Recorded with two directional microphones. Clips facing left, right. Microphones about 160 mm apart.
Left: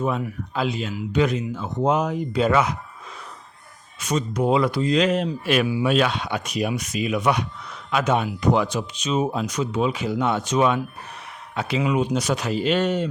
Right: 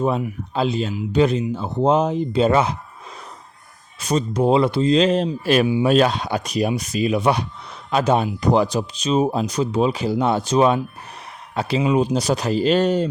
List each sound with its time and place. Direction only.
0.2 s speech: 25° right (ahead or behind)
4.0 s speech: 30° right (ahead or behind)